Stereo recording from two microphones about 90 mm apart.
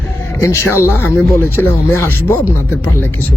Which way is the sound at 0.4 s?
30° left (ahead or behind).